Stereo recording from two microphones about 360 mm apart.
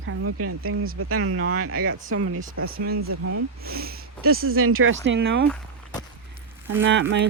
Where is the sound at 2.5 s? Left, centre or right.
Right.